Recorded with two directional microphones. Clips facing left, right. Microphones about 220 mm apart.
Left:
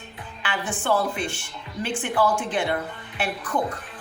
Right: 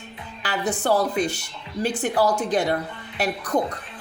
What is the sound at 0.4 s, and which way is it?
A woman's voice, 40° right (ahead or behind).